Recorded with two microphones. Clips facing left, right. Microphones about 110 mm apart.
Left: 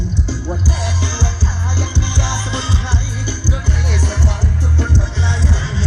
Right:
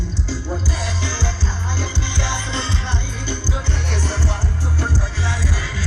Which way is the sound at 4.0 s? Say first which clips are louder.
Left 2 dB; 15° left (ahead or behind).